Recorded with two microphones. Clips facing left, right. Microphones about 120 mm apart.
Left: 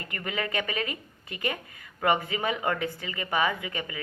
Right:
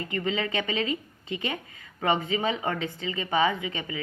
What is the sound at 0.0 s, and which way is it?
A woman's voice, 25° right (ahead or behind).